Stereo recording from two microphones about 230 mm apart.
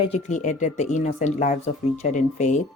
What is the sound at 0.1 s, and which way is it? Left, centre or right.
Speech, left.